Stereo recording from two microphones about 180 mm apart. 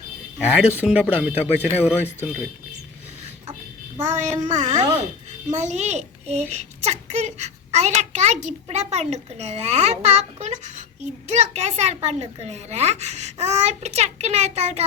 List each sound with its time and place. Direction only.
0.3 s speech: 5° right (ahead or behind)
3.9 s a child's voice: 40° right (ahead or behind)